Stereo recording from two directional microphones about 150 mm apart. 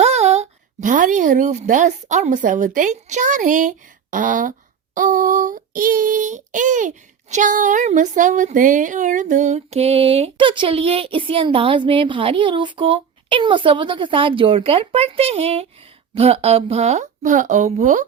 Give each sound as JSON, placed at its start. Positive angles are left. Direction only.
{"t": 0.0, "sound": "a woman's voice", "side_deg": -45}
{"t": 4.9, "sound": "child singing", "side_deg": -60}